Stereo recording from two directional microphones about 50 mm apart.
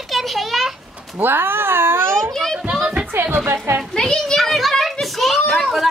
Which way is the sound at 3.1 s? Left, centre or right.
Right.